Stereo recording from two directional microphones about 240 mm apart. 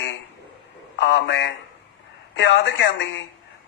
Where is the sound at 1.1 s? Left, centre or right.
Left.